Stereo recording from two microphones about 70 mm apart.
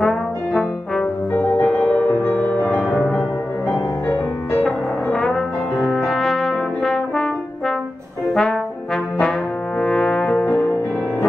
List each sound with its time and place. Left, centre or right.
0.0 s brass instrument: centre
1.3 s music: left
4.6 s brass instrument: centre
8.4 s trombone: centre
9.8 s brass instrument: centre
10.3 s music: left